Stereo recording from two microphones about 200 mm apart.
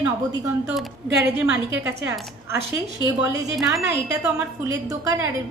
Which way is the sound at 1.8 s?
10° right (ahead or behind).